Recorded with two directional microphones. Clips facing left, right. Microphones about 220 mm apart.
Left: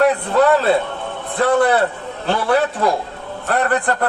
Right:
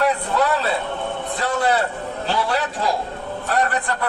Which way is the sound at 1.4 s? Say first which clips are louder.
Left 7 dB; 55° left (ahead or behind).